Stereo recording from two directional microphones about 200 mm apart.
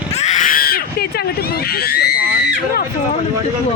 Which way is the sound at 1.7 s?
50° left (ahead or behind).